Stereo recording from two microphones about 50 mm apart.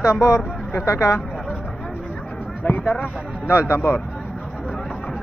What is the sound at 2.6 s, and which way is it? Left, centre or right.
Speech, left.